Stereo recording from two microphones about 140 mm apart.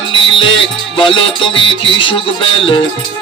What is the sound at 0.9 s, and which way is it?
Music, 35° left (ahead or behind).